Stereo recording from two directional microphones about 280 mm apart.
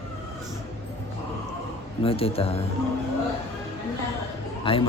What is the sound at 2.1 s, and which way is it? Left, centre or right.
Speech, centre.